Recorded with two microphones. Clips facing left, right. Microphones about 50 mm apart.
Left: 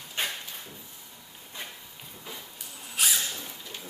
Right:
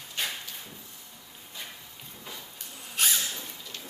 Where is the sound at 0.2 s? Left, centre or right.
Left.